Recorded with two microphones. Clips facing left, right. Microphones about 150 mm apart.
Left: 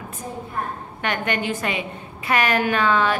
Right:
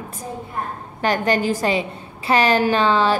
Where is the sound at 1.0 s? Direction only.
35° right (ahead or behind).